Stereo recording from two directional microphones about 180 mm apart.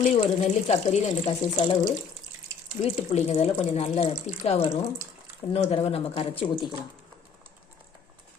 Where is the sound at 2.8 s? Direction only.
30° left (ahead or behind).